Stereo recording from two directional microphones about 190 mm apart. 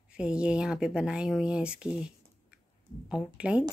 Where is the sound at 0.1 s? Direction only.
5° right (ahead or behind).